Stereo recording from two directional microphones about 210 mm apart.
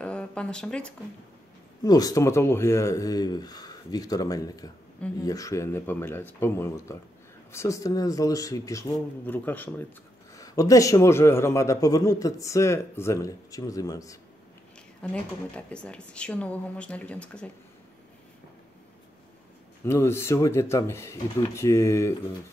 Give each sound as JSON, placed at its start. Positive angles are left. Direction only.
{"t": 0.0, "sound": "a sound", "side_deg": 5}
{"t": 1.8, "sound": "a man's voice", "side_deg": 20}
{"t": 15.0, "sound": "speech", "side_deg": 5}
{"t": 19.8, "sound": "a man's voice", "side_deg": 10}